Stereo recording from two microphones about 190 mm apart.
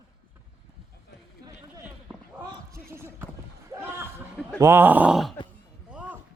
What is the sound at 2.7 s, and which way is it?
Basketball bounce, 15° right (ahead or behind).